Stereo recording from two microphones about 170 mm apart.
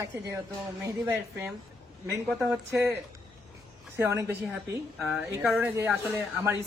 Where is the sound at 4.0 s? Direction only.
15° right (ahead or behind).